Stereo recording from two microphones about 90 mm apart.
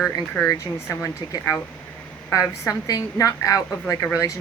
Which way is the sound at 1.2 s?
50° left (ahead or behind).